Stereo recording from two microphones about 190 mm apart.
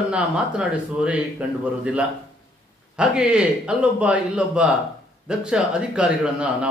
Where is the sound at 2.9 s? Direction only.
5° right (ahead or behind).